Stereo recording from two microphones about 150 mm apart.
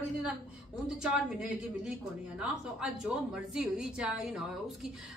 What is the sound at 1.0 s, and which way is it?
A woman's voice, 5° right (ahead or behind).